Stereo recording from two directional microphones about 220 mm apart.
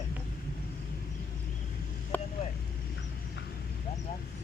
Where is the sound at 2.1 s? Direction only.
10° left (ahead or behind).